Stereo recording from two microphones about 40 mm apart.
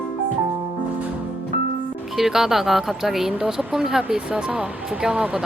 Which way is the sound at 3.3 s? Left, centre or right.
Centre.